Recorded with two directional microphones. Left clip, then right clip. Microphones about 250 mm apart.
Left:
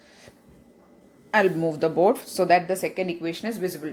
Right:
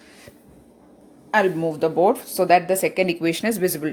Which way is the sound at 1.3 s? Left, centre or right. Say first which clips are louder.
Right 2 dB; centre.